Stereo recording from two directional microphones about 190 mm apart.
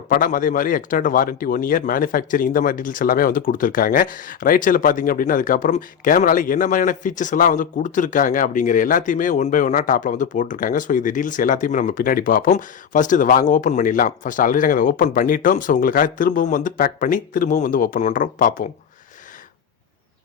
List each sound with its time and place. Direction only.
0.1 s a man's voice: 45° left (ahead or behind)